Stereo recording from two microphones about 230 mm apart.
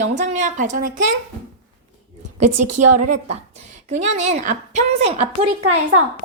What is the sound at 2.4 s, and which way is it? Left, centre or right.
Speech, right.